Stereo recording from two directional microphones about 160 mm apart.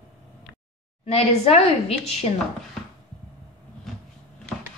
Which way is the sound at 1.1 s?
40° left (ahead or behind).